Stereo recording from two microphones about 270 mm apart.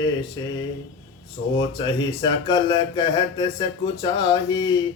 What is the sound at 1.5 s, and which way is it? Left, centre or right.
Speech, centre.